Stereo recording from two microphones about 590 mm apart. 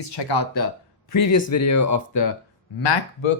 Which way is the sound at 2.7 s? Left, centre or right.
Left.